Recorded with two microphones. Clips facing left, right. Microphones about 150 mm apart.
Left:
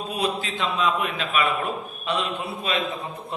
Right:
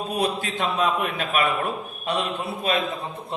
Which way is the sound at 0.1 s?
45° right (ahead or behind).